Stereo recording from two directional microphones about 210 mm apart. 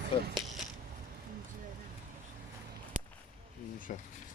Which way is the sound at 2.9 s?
40° right (ahead or behind).